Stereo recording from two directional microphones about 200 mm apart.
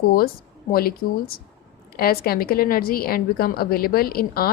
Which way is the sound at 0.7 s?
50° left (ahead or behind).